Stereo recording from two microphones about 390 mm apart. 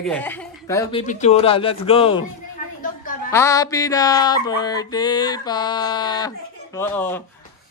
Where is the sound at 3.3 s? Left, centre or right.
Centre.